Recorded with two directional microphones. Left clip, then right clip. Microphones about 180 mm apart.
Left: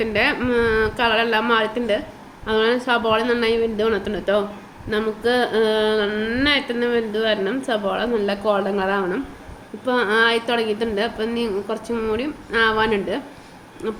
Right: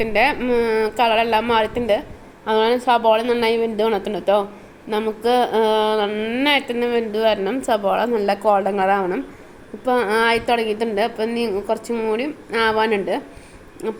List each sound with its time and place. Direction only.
0.0 s speech: 25° right (ahead or behind)